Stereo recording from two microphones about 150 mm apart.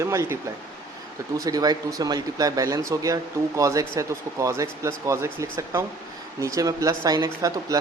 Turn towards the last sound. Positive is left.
turn(degrees=-25)  # may be behind; listen again after turning